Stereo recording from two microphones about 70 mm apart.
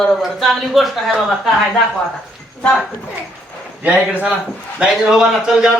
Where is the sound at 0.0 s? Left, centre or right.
Centre.